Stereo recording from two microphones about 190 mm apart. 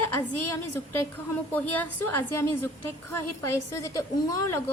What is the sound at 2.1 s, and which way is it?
A woman's voice, 10° left (ahead or behind).